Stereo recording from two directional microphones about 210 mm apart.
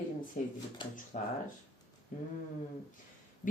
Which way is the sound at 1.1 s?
40° left (ahead or behind).